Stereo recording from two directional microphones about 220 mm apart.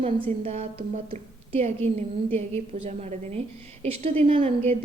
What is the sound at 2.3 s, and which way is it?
A woman's voice, 30° right (ahead or behind).